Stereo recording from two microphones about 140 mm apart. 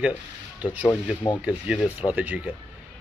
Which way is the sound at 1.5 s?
10° right (ahead or behind).